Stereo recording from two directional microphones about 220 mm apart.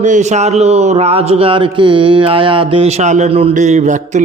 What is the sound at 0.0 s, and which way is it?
A man's voice, 35° right (ahead or behind).